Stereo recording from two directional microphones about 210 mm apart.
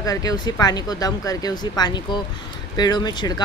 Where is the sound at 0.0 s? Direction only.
15° left (ahead or behind).